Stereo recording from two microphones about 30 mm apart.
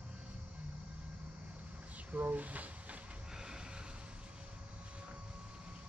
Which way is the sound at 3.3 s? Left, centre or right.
Right.